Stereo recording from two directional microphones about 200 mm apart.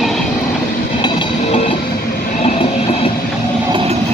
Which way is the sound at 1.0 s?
25° left (ahead or behind).